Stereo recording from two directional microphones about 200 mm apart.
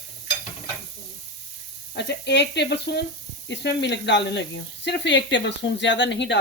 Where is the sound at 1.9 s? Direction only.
60° left (ahead or behind).